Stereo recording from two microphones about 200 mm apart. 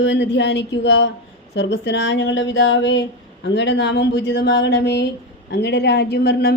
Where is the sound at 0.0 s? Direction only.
60° left (ahead or behind).